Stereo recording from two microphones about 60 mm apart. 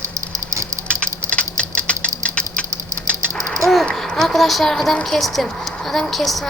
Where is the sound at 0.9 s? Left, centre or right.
Centre.